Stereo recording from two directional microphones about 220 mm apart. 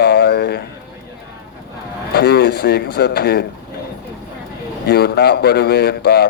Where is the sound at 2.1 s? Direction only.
45° left (ahead or behind).